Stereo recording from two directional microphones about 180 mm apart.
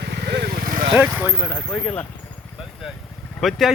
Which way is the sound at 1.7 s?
15° left (ahead or behind).